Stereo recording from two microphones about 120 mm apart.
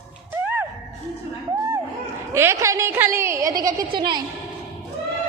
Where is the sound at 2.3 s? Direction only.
25° right (ahead or behind); by 4.2 s 40° right (ahead or behind).